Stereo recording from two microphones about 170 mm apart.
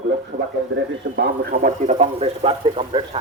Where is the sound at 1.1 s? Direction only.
65° right (ahead or behind).